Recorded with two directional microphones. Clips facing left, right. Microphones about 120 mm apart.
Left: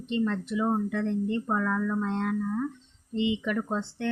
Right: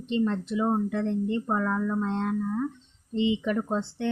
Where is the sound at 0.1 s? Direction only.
25° right (ahead or behind).